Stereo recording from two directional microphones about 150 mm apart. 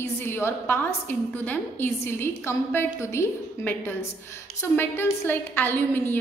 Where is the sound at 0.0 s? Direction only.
15° left (ahead or behind).